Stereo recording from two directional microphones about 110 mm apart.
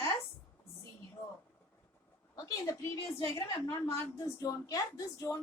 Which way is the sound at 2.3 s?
35° left (ahead or behind).